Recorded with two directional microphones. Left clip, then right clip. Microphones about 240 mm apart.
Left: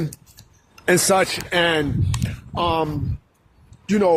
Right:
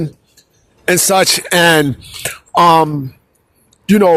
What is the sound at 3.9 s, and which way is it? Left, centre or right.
Speech, right.